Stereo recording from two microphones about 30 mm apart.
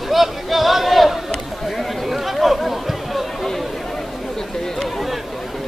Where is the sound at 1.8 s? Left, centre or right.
Centre.